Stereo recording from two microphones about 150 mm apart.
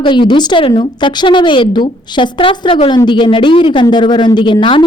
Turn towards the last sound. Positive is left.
turn(degrees=35)  # may be behind; listen again after turning